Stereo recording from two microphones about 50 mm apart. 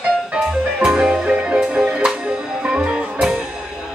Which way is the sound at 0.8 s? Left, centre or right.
Centre.